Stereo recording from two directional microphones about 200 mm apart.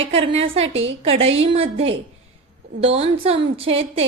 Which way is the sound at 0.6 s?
70° right (ahead or behind).